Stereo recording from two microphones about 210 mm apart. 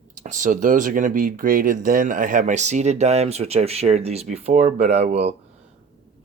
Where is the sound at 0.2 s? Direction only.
35° right (ahead or behind).